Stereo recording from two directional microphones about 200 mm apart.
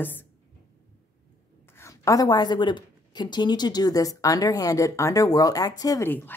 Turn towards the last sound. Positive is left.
turn(degrees=10)  # may be behind; listen again after turning